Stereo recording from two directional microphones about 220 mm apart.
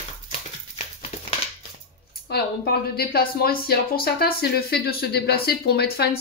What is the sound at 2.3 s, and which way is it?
A woman's voice, 45° left (ahead or behind).